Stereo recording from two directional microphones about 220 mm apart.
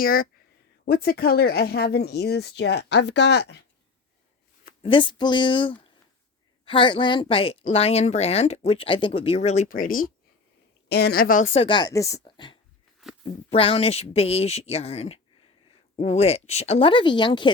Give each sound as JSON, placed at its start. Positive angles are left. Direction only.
{"t": 0.0, "sound": "speech", "side_deg": 40}
{"t": 4.8, "sound": "a woman's voice", "side_deg": 25}